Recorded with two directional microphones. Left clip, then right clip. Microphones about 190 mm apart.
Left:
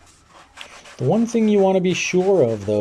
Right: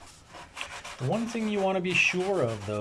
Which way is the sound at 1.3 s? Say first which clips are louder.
Left 12 dB; 30° left (ahead or behind).